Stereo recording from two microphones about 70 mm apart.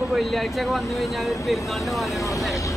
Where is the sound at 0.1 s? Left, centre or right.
Centre.